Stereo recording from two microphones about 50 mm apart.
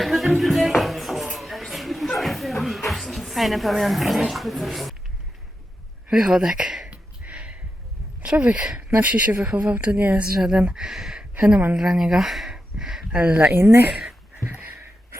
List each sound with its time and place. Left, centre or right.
0.0 s music: centre
6.1 s speech: centre
6.8 s a sound: right
8.9 s speech: right
10.3 s speech: centre
11.3 s speech: right; by 12.5 s centre
12.5 s a sound: centre
13.1 s speech: right
13.6 s speech: right
13.9 s speech: centre